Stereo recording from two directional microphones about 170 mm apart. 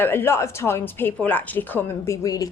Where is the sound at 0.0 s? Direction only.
15° left (ahead or behind).